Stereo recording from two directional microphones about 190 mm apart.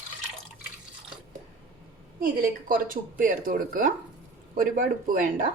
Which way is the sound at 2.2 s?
45° right (ahead or behind).